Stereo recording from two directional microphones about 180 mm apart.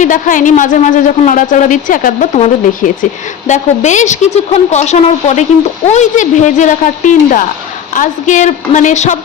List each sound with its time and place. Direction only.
0.0 s speech: 45° left (ahead or behind)